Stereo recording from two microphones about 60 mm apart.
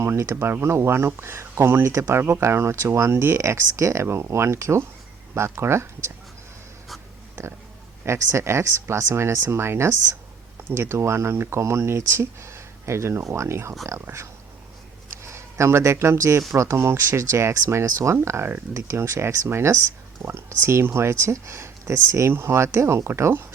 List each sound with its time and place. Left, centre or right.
0.0 s speech: right
8.0 s speech: right